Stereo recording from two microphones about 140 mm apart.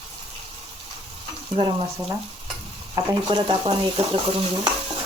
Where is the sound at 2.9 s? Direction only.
30° right (ahead or behind).